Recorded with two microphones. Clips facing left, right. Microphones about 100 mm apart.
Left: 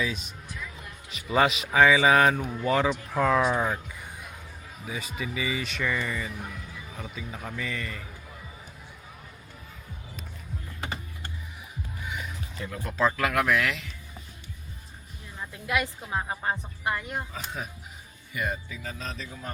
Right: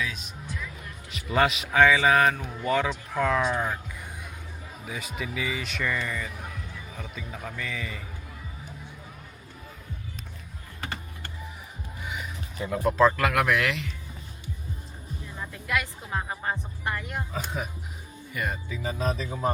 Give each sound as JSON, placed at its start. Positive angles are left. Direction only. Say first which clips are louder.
{"t": 0.0, "sound": "speech", "louder": "left 2 dB", "side_deg": 0}
{"t": 4.9, "sound": "speech", "louder": "even", "side_deg": 0}
{"t": 12.0, "sound": "music", "louder": "right 1 dB", "side_deg": 0}
{"t": 13.0, "sound": "speech", "louder": "right 2 dB", "side_deg": 0}
{"t": 15.6, "sound": "speech", "louder": "left 2 dB", "side_deg": 15}
{"t": 17.3, "sound": "speech", "louder": "right 4 dB", "side_deg": -5}
{"t": 18.8, "sound": "speech", "louder": "right 8 dB", "side_deg": -10}